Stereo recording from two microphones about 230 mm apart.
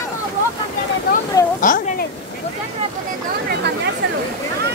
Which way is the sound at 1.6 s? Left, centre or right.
Left.